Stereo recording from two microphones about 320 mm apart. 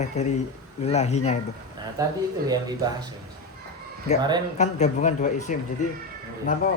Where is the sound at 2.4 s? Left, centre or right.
Centre.